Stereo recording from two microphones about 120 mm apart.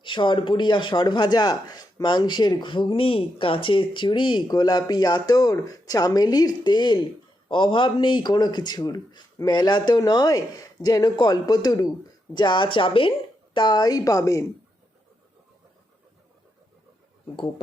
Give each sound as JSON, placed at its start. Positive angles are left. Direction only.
{"t": 0.0, "sound": "speech", "side_deg": 45}